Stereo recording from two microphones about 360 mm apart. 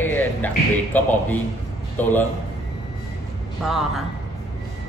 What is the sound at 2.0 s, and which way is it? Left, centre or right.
Speech, centre.